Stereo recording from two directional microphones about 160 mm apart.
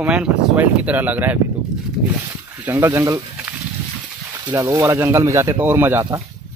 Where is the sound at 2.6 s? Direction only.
10° right (ahead or behind).